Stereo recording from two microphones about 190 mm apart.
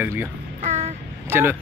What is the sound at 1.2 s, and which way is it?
Speech, 10° right (ahead or behind).